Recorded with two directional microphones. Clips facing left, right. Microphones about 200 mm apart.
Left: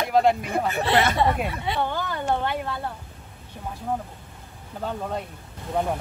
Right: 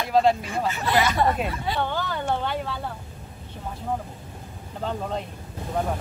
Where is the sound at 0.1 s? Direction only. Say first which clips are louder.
Even; 15° left (ahead or behind).